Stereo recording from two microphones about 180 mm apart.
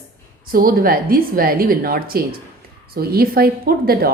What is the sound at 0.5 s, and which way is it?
A woman's voice, 55° right (ahead or behind).